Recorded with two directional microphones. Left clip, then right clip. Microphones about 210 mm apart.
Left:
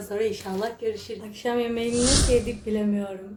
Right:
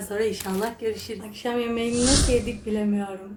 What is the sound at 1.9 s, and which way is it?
Speech, centre (ahead or behind).